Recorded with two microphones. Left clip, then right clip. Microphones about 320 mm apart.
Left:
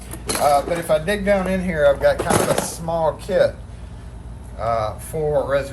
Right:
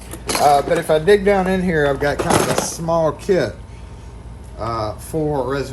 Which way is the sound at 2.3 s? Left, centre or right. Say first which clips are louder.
Right 2 dB; centre.